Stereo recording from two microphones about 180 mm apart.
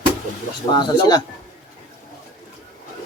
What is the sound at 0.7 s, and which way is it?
Speech, 25° left (ahead or behind).